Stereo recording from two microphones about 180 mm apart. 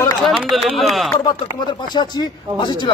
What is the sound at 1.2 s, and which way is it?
Speech, 25° left (ahead or behind).